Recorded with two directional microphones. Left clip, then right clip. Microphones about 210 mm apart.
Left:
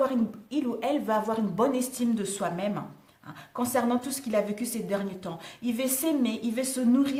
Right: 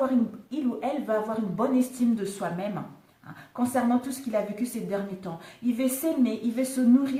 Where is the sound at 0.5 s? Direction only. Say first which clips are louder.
Left 2 dB; 45° left (ahead or behind).